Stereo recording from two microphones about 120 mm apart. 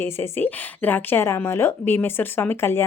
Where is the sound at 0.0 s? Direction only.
15° left (ahead or behind).